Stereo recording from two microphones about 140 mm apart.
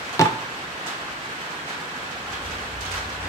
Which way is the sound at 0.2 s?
20° left (ahead or behind).